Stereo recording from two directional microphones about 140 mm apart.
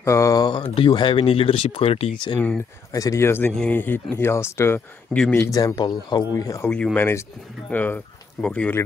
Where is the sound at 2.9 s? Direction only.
25° left (ahead or behind).